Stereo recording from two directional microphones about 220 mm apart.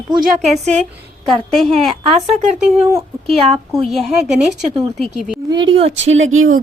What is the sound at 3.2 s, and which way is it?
Speech, 25° right (ahead or behind).